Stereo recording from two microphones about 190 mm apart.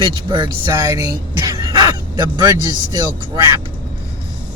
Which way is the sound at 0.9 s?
15° right (ahead or behind).